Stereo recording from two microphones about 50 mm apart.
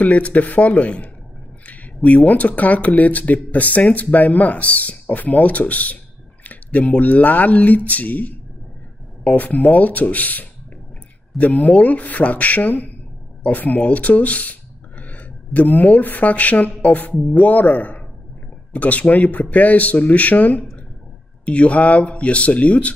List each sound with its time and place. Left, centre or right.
0.0 s speech: left
6.4 s a sound: left
6.9 s speech: left